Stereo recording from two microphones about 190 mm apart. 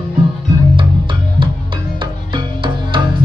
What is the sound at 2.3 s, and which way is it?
Music, 25° right (ahead or behind).